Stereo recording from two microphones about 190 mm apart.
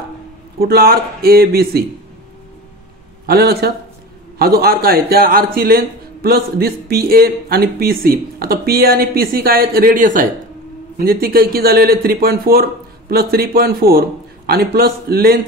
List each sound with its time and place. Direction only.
0.6 s speech: 55° right (ahead or behind)
3.3 s a man's voice: 55° right (ahead or behind)